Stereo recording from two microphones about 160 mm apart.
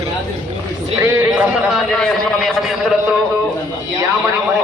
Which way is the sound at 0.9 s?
15° right (ahead or behind).